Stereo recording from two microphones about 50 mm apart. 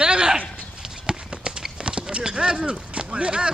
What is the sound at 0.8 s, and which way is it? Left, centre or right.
Clip-clop, centre.